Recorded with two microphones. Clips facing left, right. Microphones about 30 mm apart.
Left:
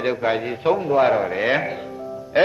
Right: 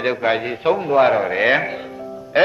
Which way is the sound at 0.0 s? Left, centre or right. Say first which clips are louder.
Right 2 dB; centre.